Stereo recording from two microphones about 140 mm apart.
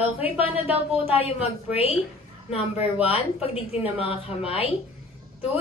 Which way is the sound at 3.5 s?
45° left (ahead or behind).